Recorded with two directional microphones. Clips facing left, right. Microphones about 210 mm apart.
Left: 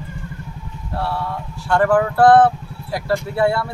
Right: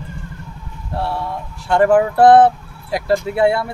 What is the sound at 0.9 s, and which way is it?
Speech, 20° right (ahead or behind).